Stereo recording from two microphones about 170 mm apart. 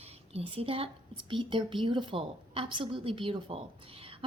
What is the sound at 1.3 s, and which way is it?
A woman's voice, 30° right (ahead or behind).